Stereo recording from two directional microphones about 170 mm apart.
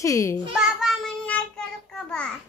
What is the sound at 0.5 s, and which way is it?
Child singing, 5° right (ahead or behind).